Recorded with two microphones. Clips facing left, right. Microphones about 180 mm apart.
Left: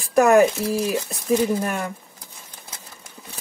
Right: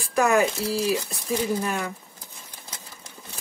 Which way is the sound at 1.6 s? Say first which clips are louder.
Left 2 dB; 55° left (ahead or behind).